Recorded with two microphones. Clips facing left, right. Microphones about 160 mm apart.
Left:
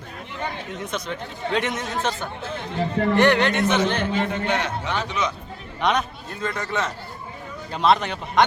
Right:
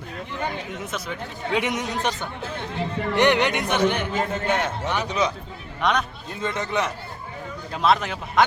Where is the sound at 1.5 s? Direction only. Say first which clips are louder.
Right 1 dB; 10° right (ahead or behind).